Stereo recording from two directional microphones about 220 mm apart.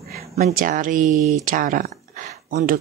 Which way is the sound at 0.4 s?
40° right (ahead or behind).